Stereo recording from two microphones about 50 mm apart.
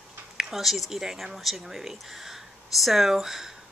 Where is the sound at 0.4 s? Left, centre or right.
Centre.